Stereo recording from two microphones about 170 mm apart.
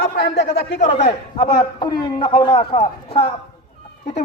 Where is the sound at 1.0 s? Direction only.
30° left (ahead or behind).